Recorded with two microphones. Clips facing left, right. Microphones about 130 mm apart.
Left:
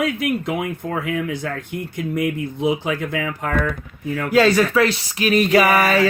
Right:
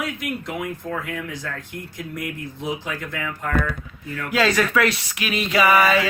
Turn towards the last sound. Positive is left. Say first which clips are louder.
# left 1 dB
turn(degrees=45)  # may be behind; listen again after turning